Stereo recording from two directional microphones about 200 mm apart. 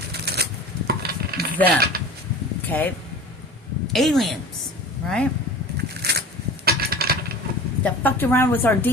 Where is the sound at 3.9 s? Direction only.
Centre (ahead or behind).